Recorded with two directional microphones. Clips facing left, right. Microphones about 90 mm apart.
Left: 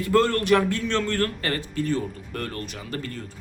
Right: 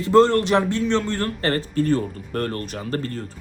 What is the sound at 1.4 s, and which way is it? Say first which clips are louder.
Speech: right 6 dB; 35° right (ahead or behind).